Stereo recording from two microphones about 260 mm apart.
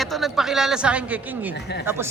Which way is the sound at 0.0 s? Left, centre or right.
Centre.